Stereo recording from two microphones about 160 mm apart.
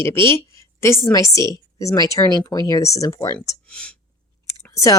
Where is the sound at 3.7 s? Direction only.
5° left (ahead or behind).